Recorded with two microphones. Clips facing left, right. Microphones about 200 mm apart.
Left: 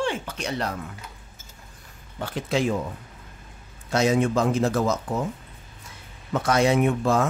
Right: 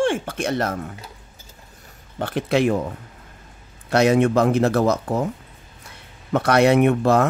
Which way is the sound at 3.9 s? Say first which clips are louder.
Right 5 dB; 65° right (ahead or behind).